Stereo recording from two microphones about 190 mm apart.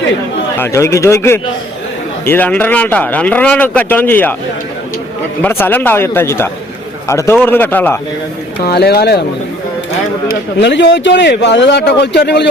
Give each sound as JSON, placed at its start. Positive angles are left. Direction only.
{"t": 0.6, "sound": "speech", "side_deg": 15}
{"t": 5.4, "sound": "speech", "side_deg": 10}
{"t": 8.6, "sound": "speech", "side_deg": 55}
{"t": 10.6, "sound": "speech", "side_deg": 65}